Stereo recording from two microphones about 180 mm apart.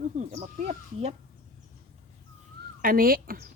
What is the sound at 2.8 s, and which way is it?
Speech, 55° right (ahead or behind).